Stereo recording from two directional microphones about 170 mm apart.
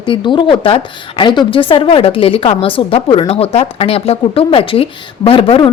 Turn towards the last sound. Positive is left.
turn(degrees=30)  # may be behind; listen again after turning